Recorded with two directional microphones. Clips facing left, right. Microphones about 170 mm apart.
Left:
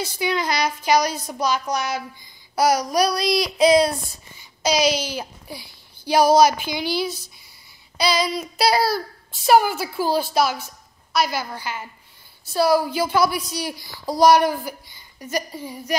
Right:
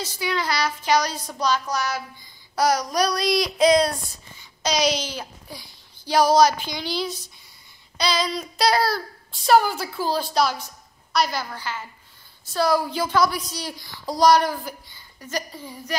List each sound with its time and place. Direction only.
0.0 s a woman's voice: 20° left (ahead or behind)
2.5 s child singing: 10° left (ahead or behind)
4.6 s a woman's voice: 5° left (ahead or behind)